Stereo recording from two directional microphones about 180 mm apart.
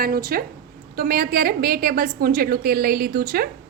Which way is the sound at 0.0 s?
55° right (ahead or behind).